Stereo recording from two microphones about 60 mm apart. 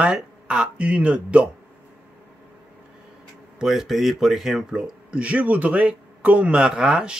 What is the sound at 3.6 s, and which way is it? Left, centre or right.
Speech, centre.